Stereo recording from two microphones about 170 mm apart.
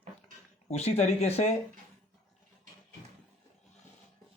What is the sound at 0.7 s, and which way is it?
Speech, 40° left (ahead or behind).